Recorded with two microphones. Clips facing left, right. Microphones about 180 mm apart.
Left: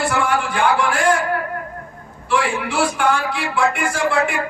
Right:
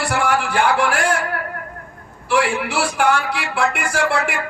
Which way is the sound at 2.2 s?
65° right (ahead or behind).